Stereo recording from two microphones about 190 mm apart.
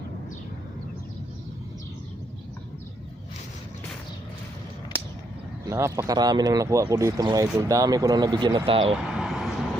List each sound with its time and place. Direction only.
5.6 s speech: 15° right (ahead or behind)
8.9 s vehicle: 5° right (ahead or behind)